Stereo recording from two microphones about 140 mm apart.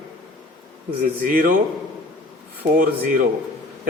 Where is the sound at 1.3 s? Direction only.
90° right.